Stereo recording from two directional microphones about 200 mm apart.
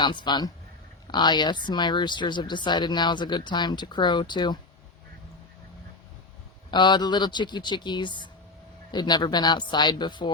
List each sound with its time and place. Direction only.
0.0 s speech: 20° left (ahead or behind)
6.7 s speech: 20° left (ahead or behind)